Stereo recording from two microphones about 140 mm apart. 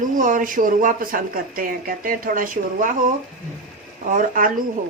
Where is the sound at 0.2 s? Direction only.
70° right (ahead or behind).